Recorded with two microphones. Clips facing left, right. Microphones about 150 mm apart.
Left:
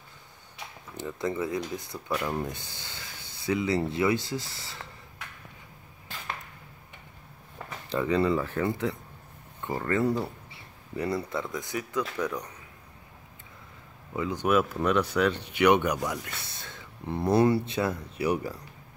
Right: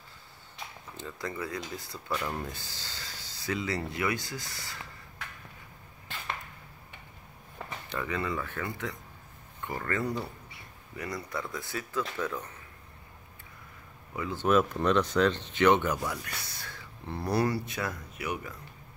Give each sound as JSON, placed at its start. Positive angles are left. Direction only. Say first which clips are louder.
{"t": 1.0, "sound": "speech", "louder": "left 7 dB", "side_deg": 20}
{"t": 2.0, "sound": "speech", "louder": "left 4 dB", "side_deg": 5}
{"t": 2.4, "sound": "speech", "louder": "left 4 dB", "side_deg": 20}
{"t": 7.9, "sound": "speech", "louder": "left 8 dB", "side_deg": 30}
{"t": 14.1, "sound": "speech", "louder": "left 1 dB", "side_deg": 15}